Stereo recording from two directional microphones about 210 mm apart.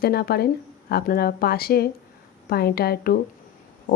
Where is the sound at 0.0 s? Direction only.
45° left (ahead or behind).